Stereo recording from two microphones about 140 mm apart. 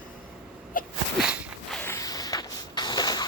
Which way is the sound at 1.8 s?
20° left (ahead or behind).